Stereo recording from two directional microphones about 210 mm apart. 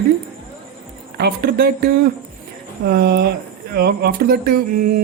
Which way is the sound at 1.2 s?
50° right (ahead or behind).